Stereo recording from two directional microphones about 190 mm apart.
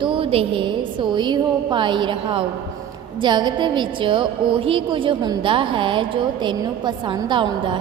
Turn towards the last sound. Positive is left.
turn(degrees=-25)  # may be behind; listen again after turning